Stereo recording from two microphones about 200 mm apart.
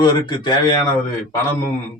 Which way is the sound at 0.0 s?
20° left (ahead or behind).